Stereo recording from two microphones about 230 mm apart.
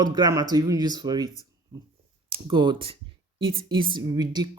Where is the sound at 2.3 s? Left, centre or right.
Centre.